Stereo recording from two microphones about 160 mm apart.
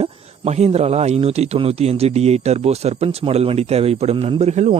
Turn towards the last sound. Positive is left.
turn(degrees=-45)  # may be behind; listen again after turning